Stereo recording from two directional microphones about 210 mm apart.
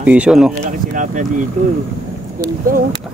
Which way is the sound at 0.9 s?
35° right (ahead or behind).